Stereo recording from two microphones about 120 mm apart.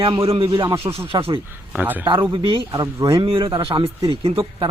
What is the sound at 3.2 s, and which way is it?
Speech, 45° right (ahead or behind).